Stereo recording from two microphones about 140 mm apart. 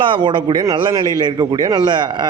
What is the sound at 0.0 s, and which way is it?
A man's voice, 35° right (ahead or behind).